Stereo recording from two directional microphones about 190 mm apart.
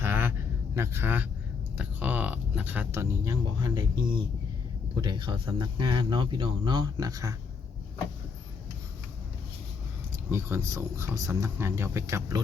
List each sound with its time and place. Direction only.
0.0 s a sound: 10° right (ahead or behind)
0.8 s speech: 10° right (ahead or behind)
10.2 s speech: 15° right (ahead or behind)